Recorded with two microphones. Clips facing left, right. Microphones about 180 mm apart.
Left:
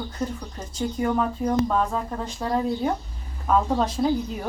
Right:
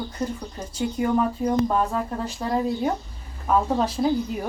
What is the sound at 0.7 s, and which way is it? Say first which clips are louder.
Speech: right 1 dB; 10° right (ahead or behind).